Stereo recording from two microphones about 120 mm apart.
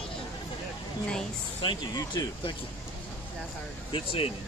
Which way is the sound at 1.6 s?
40° left (ahead or behind).